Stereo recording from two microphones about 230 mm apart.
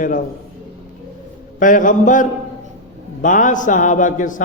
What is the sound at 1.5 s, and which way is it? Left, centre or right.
A man's voice, left.